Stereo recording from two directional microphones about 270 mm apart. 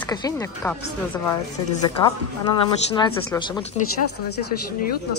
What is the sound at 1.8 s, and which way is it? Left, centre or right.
Speech, centre.